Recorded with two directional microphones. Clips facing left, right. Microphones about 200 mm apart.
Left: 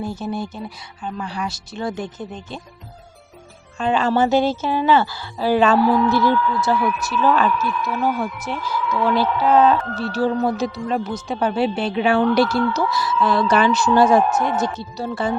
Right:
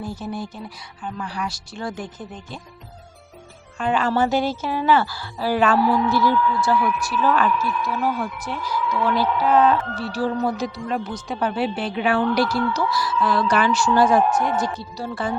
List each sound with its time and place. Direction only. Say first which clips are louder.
0.0 s a woman's voice: left 3 dB; 25° left (ahead or behind)
3.8 s a woman's voice: left 2 dB; 25° left (ahead or behind)